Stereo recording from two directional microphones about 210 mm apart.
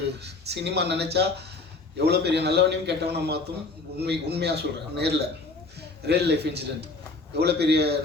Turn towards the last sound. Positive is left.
turn(degrees=-50)  # may be behind; listen again after turning